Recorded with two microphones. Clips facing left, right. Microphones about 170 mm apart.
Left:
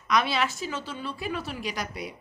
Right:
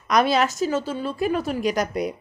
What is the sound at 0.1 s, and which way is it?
A woman's voice, 45° right (ahead or behind).